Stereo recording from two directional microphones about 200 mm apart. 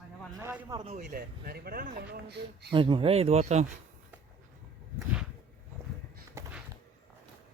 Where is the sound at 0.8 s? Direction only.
35° right (ahead or behind); by 2.7 s 55° right (ahead or behind).